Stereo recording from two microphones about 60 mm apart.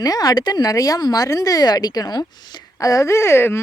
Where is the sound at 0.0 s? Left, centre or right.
Left.